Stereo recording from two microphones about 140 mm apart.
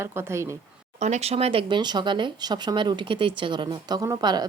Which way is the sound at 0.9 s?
55° right (ahead or behind).